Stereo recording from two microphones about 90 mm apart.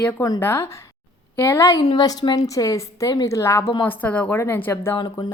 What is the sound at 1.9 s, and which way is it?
Speech, 50° left (ahead or behind).